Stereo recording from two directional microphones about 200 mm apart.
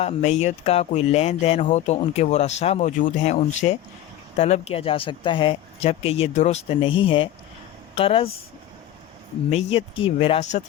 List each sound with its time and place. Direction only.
0.0 s speech: 35° left (ahead or behind)
9.5 s speech: 30° left (ahead or behind)